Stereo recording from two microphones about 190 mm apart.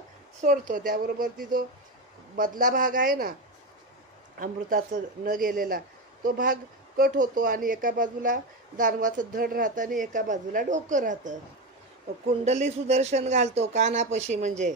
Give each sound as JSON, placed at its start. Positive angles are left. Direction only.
{"t": 0.4, "sound": "speech", "side_deg": -45}
{"t": 4.4, "sound": "speech", "side_deg": -45}
{"t": 12.4, "sound": "speech", "side_deg": -35}